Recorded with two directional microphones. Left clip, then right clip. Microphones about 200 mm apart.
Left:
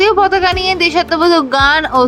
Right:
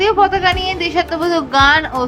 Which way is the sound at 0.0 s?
30° left (ahead or behind).